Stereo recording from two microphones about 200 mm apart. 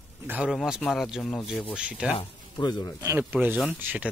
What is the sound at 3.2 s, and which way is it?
Speech, 10° right (ahead or behind).